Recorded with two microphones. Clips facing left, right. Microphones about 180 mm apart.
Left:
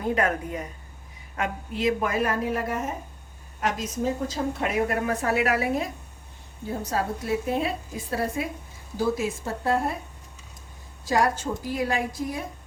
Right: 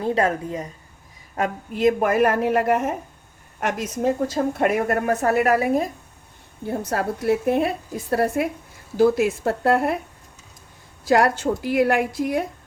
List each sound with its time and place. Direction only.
0.0 s speech: 30° right (ahead or behind)
1.4 s a woman's voice: 50° right (ahead or behind)
6.7 s a woman's voice: 65° right (ahead or behind)
9.0 s a woman's voice: 70° right (ahead or behind)
11.0 s a woman's voice: 70° right (ahead or behind)